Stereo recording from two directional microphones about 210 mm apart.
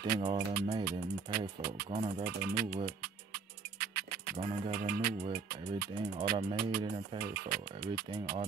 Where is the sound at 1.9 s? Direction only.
30° right (ahead or behind).